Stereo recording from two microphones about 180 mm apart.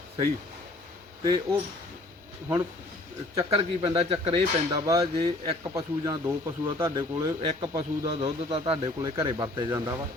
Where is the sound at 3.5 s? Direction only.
30° right (ahead or behind).